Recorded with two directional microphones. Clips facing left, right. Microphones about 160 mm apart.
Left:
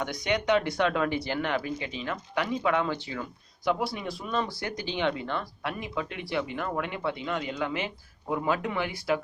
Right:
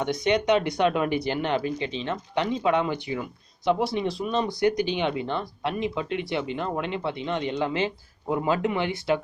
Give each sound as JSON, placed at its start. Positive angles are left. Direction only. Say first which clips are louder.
{"t": 0.0, "sound": "speech", "louder": "right 5 dB", "side_deg": -20}